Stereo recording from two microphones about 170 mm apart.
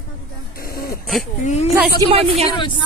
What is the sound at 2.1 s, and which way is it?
Speech, 35° right (ahead or behind).